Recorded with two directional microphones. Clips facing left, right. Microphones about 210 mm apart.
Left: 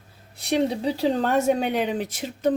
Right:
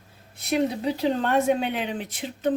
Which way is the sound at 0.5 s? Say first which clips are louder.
Left 1 dB; 35° left (ahead or behind).